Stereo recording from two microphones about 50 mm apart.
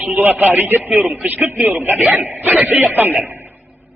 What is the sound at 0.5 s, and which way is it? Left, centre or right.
A man's voice, right.